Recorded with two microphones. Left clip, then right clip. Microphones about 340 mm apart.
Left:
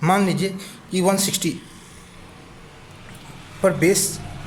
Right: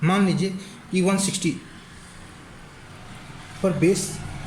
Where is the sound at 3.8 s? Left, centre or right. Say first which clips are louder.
Even; left.